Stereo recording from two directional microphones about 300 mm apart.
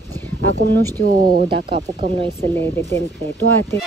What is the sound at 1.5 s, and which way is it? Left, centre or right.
Speech, centre.